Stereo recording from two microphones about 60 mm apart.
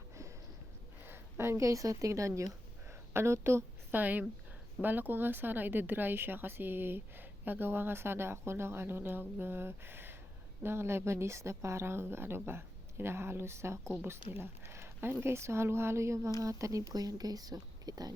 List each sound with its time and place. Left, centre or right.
1.0 s speech: right
3.9 s a woman's voice: right
16.4 s speech: right
16.9 s speech: right